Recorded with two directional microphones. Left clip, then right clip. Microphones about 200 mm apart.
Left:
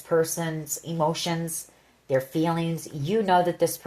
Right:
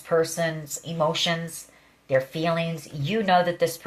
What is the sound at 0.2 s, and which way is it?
Speech, 45° left (ahead or behind).